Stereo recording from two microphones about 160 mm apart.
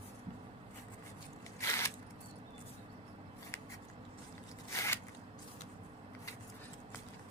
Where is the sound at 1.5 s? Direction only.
20° left (ahead or behind).